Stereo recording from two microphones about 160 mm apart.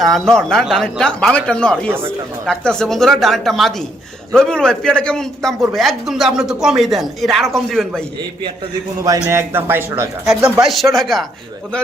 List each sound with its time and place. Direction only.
0.0 s a man's voice: centre (ahead or behind)
9.0 s speech: 20° right (ahead or behind)
10.6 s a man's voice: centre (ahead or behind)